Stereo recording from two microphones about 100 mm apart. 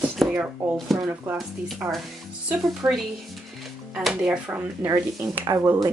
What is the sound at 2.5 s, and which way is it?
Speech, 5° right (ahead or behind).